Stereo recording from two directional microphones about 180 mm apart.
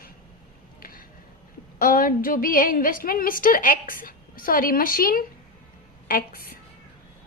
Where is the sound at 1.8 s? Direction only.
50° left (ahead or behind).